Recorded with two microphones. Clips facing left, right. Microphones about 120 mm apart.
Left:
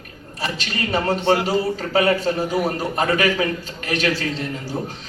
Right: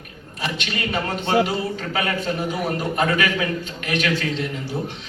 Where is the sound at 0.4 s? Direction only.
35° left (ahead or behind).